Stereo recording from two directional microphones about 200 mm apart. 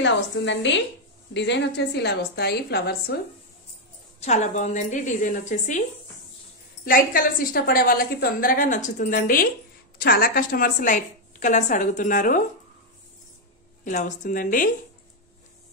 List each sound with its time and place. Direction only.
0.0 s a woman's voice: 65° left (ahead or behind)
4.2 s a woman's voice: 35° left (ahead or behind)
6.8 s a woman's voice: 45° left (ahead or behind)
13.8 s a woman's voice: 40° left (ahead or behind)